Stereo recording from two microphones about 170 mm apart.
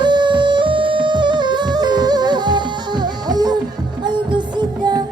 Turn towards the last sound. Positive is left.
turn(degrees=-25)  # may be behind; listen again after turning